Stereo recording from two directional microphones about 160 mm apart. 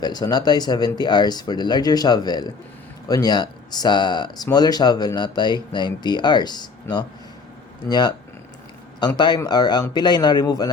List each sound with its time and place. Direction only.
0.0 s speech: 25° left (ahead or behind)